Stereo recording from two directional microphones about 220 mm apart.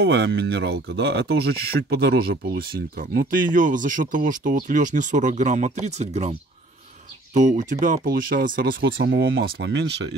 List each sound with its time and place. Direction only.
0.0 s speech: 50° right (ahead or behind); by 6.3 s 30° right (ahead or behind)
7.3 s speech: 35° right (ahead or behind)
9.3 s speech: 55° right (ahead or behind)